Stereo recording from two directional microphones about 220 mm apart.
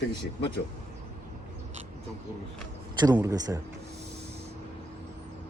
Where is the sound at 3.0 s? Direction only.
15° right (ahead or behind).